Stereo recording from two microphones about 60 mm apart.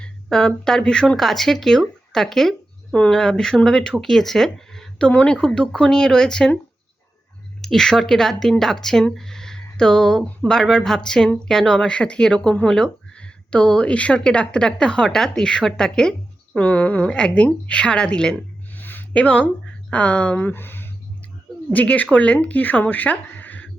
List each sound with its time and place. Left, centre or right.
0.0 s speech: centre
7.6 s speech: centre
16.6 s a woman's voice: left
18.7 s a sound: left
19.2 s a woman's voice: left
20.4 s speech: left
21.7 s speech: left